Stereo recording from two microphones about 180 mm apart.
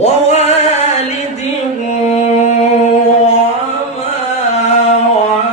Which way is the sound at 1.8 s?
40° left (ahead or behind).